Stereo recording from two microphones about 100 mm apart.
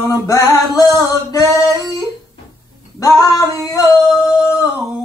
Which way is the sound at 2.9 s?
35° left (ahead or behind).